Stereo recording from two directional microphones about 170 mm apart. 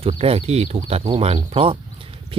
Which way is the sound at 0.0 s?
35° right (ahead or behind).